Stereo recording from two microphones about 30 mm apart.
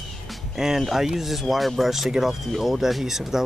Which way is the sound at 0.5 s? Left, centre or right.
Centre.